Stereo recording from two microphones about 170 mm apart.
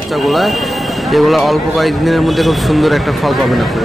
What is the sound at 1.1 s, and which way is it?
Speech, centre (ahead or behind).